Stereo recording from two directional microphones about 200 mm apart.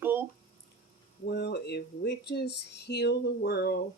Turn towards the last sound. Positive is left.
turn(degrees=55)  # may be behind; listen again after turning